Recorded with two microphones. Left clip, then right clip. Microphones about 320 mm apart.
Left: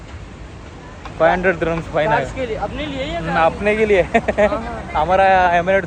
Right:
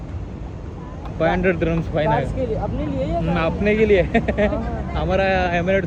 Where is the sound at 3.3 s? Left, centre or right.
Centre.